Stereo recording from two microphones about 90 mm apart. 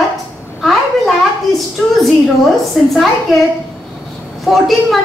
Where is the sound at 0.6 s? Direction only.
Centre (ahead or behind).